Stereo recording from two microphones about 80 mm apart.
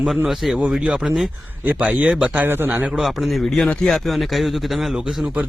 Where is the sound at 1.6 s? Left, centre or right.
Centre.